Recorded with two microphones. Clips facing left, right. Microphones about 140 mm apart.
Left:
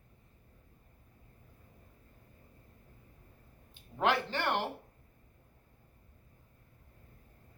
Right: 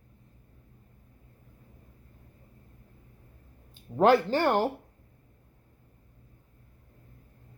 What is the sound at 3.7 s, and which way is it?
Speech, 40° right (ahead or behind).